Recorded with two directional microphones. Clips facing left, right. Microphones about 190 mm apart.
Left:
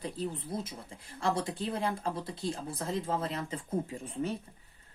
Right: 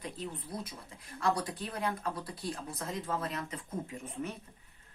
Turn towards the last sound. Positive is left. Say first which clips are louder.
# left 4 dB
turn(degrees=30)  # may be behind; listen again after turning